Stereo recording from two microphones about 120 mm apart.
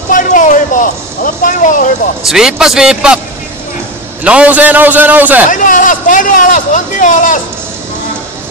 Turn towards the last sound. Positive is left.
turn(degrees=90)